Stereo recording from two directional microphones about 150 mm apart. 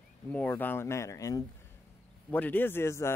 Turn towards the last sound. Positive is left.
turn(degrees=15)  # may be behind; listen again after turning